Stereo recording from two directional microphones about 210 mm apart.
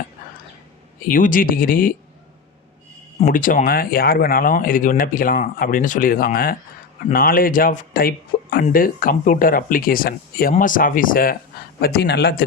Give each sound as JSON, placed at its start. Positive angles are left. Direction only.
{"t": 1.0, "sound": "speech", "side_deg": 40}
{"t": 3.2, "sound": "speech", "side_deg": 35}